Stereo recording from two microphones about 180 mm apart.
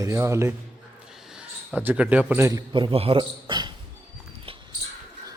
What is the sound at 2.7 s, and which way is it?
A man's voice, 30° right (ahead or behind).